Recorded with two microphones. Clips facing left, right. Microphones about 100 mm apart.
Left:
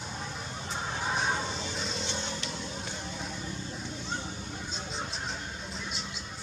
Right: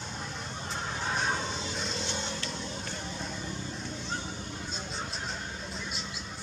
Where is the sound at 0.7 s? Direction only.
5° left (ahead or behind).